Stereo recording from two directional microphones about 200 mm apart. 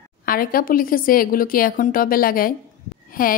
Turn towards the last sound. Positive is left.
turn(degrees=45)  # may be behind; listen again after turning